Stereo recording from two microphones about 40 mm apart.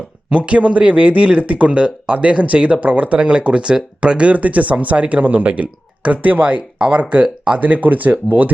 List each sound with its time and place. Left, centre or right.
0.3 s speech: right